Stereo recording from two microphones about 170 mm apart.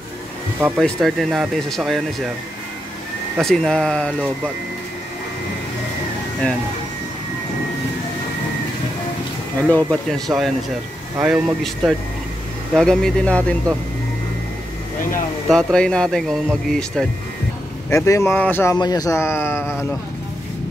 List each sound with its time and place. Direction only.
0.7 s speech: centre (ahead or behind)
3.3 s speech: centre (ahead or behind)
9.7 s speech: 5° left (ahead or behind)
15.4 s speech: 5° left (ahead or behind)
17.8 s speech: 15° left (ahead or behind)